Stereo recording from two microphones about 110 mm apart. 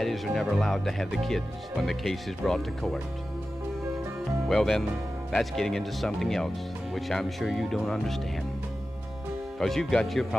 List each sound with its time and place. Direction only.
0.0 s speech: centre (ahead or behind)
4.5 s speech: centre (ahead or behind)
9.6 s speech: 5° left (ahead or behind)